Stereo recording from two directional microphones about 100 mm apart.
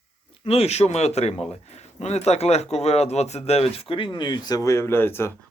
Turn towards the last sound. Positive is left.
turn(degrees=25)  # may be behind; listen again after turning